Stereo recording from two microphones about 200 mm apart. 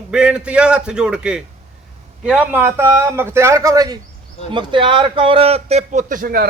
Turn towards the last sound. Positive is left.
turn(degrees=-45)  # may be behind; listen again after turning